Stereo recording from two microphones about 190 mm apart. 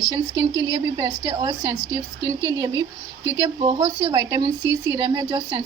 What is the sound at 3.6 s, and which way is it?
Speech, 30° right (ahead or behind).